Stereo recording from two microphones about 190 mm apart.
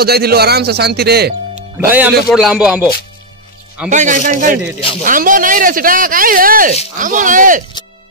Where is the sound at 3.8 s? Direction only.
40° right (ahead or behind).